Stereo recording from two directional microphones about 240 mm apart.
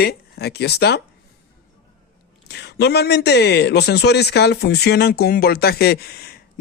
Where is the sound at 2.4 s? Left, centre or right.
Left.